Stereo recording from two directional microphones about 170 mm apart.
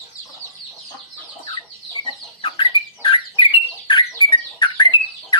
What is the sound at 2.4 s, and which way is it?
Bird, 30° left (ahead or behind).